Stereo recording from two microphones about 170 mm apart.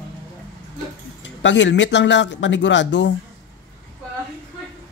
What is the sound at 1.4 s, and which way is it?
Speech, 90° left.